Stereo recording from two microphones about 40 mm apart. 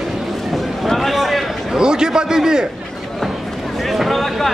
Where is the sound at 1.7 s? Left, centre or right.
Centre.